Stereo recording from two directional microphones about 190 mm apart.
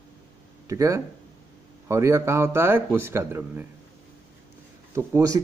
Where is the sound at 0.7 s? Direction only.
15° right (ahead or behind).